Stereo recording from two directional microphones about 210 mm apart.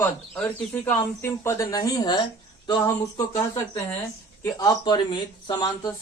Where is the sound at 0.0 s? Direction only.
5° left (ahead or behind).